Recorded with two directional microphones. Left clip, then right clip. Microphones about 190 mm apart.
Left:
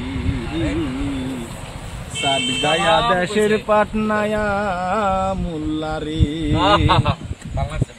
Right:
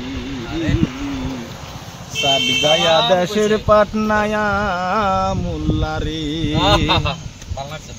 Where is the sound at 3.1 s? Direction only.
55° right (ahead or behind); by 5.3 s 30° right (ahead or behind).